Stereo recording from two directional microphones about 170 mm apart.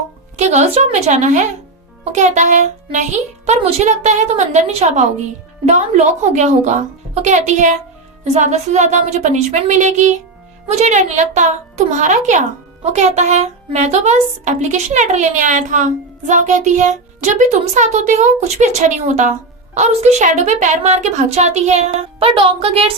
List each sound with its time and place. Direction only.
0.3 s a woman's voice: 40° right (ahead or behind)